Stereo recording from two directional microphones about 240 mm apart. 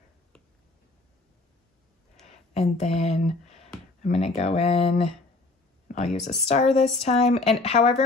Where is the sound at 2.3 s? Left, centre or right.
Left.